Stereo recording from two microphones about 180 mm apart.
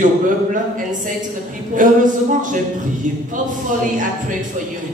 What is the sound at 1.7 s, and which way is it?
Speech, 45° right (ahead or behind).